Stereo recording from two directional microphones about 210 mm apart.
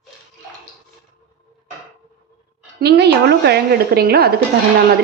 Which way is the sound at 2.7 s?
50° right (ahead or behind).